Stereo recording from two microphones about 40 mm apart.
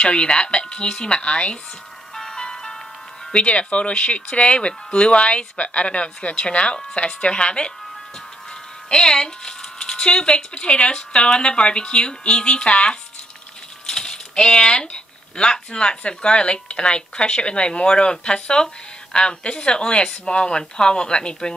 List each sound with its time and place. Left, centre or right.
0.0 s speech: left
2.1 s music: centre
3.4 s speech: left
8.8 s speech: centre
13.8 s speech: centre